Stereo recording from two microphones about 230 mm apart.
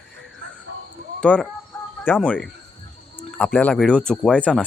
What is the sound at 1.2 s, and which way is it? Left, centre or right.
Speech, centre.